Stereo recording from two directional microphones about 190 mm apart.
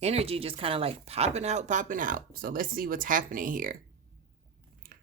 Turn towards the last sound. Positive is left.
turn(degrees=-45)  # may be behind; listen again after turning